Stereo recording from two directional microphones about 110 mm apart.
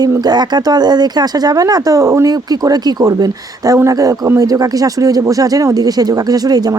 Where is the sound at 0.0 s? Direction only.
35° right (ahead or behind).